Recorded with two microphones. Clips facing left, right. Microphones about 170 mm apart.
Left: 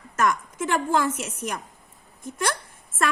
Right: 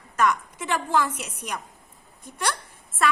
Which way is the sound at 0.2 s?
45° left (ahead or behind).